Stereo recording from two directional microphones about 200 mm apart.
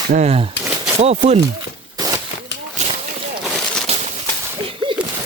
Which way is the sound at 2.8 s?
35° right (ahead or behind).